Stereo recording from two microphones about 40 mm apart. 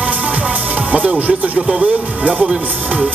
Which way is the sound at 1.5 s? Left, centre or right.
Centre.